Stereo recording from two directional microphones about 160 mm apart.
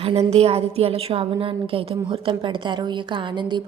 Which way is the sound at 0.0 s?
40° right (ahead or behind).